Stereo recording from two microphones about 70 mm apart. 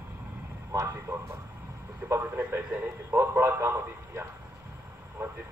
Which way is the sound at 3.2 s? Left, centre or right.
Right.